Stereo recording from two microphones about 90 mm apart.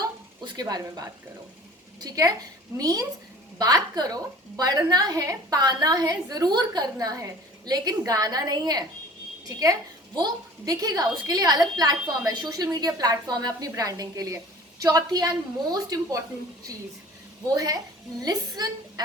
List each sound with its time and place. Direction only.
0.0 s a sound: 45° right (ahead or behind)
2.0 s a woman's voice: 40° right (ahead or behind)
17.5 s a woman's voice: 45° right (ahead or behind)